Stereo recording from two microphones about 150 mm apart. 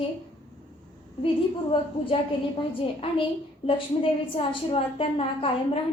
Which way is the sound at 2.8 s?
35° left (ahead or behind).